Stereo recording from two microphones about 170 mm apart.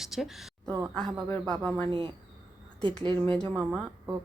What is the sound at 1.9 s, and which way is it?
Speech, 30° right (ahead or behind).